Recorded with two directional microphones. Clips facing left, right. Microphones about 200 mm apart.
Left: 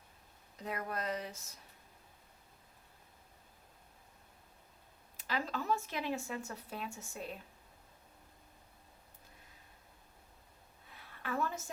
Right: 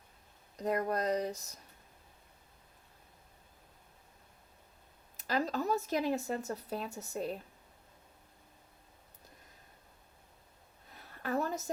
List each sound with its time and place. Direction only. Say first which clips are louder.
0.5 s speech: right 8 dB; 40° right (ahead or behind)
5.1 s speech: right 5 dB; 40° right (ahead or behind)
10.8 s a sound: right 4 dB; 40° right (ahead or behind)